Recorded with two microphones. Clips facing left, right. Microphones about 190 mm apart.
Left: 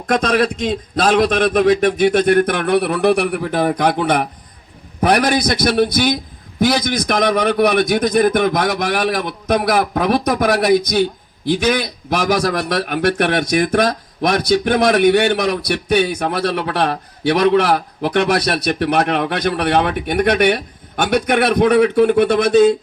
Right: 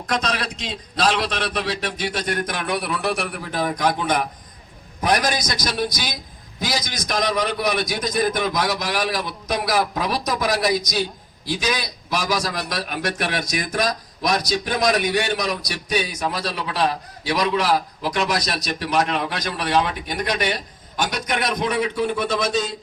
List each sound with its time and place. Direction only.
0.1 s a man's voice: 50° left (ahead or behind)